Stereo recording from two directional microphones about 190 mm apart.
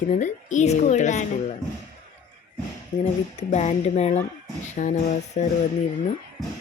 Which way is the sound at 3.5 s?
35° left (ahead or behind).